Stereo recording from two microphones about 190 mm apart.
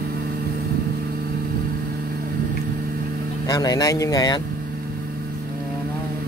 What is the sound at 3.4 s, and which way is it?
Speech, 20° left (ahead or behind).